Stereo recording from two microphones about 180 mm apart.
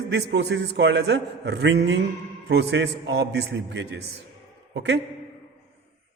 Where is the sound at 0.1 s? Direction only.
65° right (ahead or behind).